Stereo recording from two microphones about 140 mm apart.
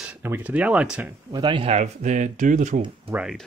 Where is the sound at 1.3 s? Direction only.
35° right (ahead or behind).